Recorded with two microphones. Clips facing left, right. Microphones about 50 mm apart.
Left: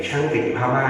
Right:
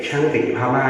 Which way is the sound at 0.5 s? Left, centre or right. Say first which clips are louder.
Right 2 dB; centre.